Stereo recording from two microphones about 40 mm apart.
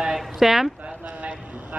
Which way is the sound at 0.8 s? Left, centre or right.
Right.